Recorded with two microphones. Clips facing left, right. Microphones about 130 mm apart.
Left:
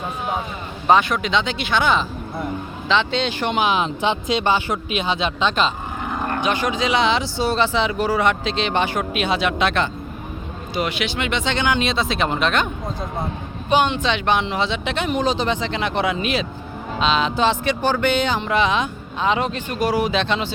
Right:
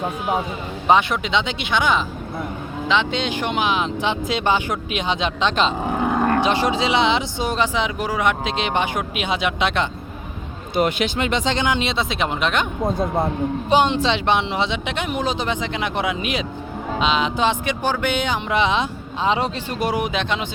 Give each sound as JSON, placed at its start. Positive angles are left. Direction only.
{"t": 0.9, "sound": "speech", "side_deg": -20}
{"t": 3.6, "sound": "speech", "side_deg": 0}
{"t": 4.4, "sound": "speech", "side_deg": -15}
{"t": 6.4, "sound": "speech", "side_deg": -30}
{"t": 10.8, "sound": "speech", "side_deg": -45}
{"t": 13.7, "sound": "speech", "side_deg": -30}